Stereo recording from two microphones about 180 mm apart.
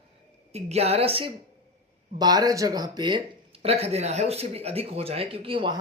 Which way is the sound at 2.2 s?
20° right (ahead or behind).